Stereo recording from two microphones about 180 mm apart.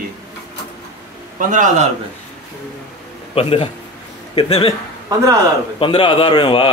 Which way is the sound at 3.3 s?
30° left (ahead or behind).